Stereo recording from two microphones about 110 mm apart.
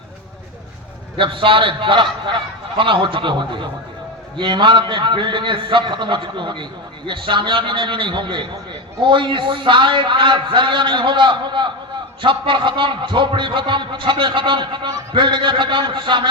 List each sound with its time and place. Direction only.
1.1 s a man's voice: 50° right (ahead or behind)